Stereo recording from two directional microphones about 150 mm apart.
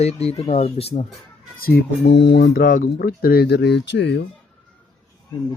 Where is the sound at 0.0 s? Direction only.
45° left (ahead or behind).